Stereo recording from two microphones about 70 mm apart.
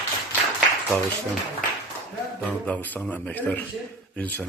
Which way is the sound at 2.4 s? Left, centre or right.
Left.